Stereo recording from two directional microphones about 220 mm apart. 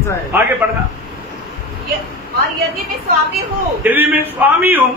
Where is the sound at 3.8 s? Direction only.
10° right (ahead or behind).